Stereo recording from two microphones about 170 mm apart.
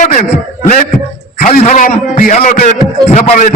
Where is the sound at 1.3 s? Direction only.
45° left (ahead or behind).